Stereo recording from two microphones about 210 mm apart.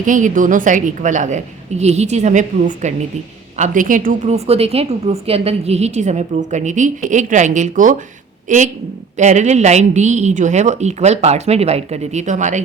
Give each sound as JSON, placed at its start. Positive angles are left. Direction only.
{"t": 0.0, "sound": "a woman's voice", "side_deg": -40}